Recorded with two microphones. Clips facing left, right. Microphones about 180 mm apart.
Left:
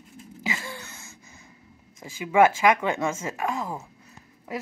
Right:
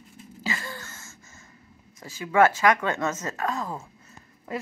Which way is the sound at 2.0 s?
15° left (ahead or behind).